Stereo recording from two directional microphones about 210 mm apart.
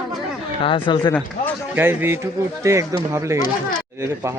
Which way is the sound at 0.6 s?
25° left (ahead or behind).